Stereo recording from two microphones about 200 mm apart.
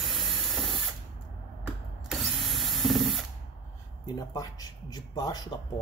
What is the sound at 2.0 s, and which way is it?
Mechanisms, centre (ahead or behind).